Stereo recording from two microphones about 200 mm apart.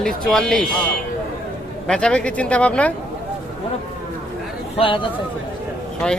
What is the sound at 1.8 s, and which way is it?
A man's voice, 5° left (ahead or behind).